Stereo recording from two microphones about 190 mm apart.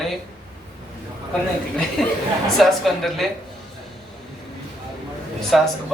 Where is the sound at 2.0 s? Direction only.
5° left (ahead or behind).